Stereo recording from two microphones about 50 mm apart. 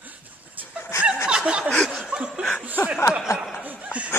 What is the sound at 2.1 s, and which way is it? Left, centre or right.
Laughter, centre.